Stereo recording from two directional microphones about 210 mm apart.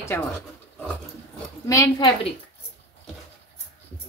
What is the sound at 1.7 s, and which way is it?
Speech, 15° left (ahead or behind).